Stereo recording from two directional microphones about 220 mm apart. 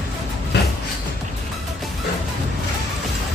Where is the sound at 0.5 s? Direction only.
50° left (ahead or behind).